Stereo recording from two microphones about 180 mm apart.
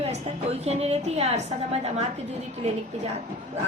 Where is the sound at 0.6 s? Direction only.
35° right (ahead or behind).